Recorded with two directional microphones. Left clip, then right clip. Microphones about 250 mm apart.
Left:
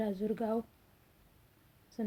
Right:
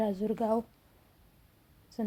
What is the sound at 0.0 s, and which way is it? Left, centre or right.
Speech, centre.